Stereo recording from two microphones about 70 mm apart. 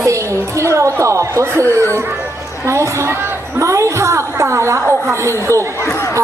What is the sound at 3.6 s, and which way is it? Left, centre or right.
A woman's voice, right.